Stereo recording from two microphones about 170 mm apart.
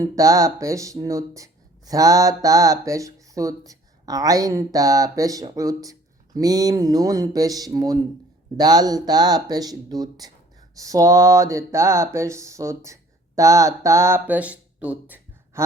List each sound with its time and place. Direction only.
0.0 s speech: 20° right (ahead or behind)